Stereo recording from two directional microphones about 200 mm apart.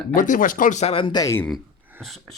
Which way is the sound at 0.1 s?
45° left (ahead or behind).